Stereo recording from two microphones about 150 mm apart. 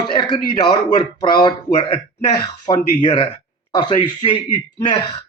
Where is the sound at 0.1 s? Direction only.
30° left (ahead or behind).